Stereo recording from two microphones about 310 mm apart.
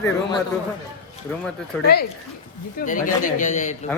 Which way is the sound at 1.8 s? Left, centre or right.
Left.